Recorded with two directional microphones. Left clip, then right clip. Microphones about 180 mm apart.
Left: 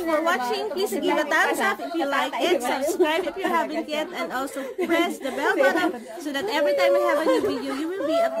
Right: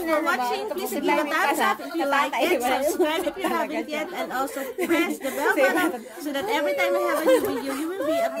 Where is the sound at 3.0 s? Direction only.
10° left (ahead or behind).